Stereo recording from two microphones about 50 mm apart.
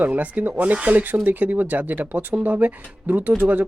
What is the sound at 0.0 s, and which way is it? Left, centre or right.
Speech, right.